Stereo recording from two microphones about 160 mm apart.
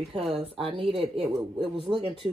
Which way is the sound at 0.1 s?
35° right (ahead or behind).